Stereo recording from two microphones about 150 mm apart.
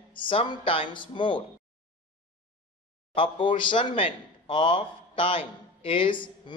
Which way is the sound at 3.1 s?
35° left (ahead or behind).